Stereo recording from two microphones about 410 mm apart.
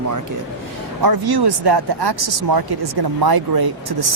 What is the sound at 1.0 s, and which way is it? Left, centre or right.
Speech, right.